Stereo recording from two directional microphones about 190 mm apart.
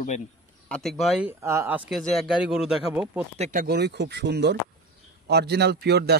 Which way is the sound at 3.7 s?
60° right (ahead or behind).